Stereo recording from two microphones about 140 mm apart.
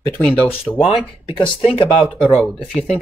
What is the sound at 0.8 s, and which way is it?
Speech, 35° left (ahead or behind).